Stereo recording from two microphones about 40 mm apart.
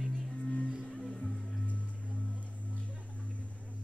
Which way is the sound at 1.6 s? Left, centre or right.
Left.